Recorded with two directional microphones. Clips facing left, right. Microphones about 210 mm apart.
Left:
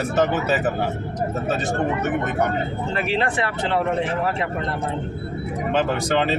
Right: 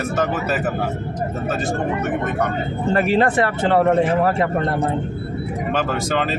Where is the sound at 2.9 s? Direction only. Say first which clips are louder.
Right 7 dB; 45° right (ahead or behind).